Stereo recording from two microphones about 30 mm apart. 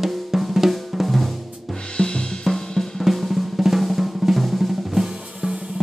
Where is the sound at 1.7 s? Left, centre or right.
Left.